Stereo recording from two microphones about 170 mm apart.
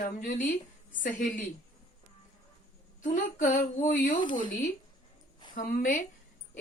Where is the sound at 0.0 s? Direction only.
50° left (ahead or behind).